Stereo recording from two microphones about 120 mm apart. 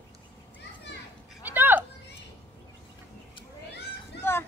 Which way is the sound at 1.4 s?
15° right (ahead or behind).